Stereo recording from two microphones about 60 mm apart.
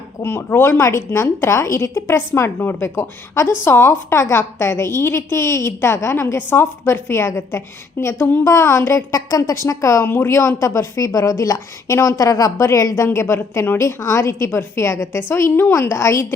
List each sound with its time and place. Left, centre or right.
0.2 s a woman's voice: left
9.1 s a woman's voice: left
10.0 s a woman's voice: left
12.6 s speech: left
13.1 s a woman's voice: left
13.7 s speech: left
15.3 s a woman's voice: left
15.9 s speech: left